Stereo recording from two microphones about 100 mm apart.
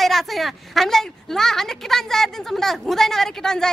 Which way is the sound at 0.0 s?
Centre (ahead or behind).